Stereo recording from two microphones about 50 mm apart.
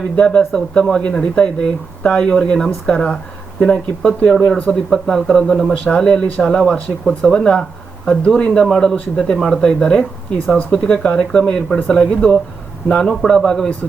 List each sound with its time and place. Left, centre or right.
0.2 s speech: centre